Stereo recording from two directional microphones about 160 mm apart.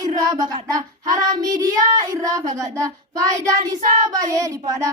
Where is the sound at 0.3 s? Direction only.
25° right (ahead or behind).